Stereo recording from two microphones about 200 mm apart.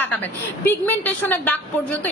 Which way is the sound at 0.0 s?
10° left (ahead or behind).